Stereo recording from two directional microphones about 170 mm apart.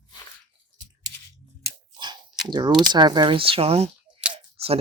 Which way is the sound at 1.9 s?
25° right (ahead or behind).